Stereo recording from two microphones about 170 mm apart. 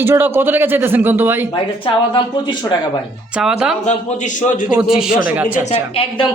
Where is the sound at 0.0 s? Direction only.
10° right (ahead or behind).